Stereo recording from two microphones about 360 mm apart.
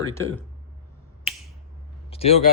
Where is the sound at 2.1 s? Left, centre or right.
Centre.